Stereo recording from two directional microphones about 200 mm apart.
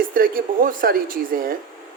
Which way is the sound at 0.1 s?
45° right (ahead or behind).